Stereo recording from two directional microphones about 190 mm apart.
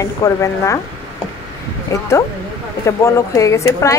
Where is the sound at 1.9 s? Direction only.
15° left (ahead or behind).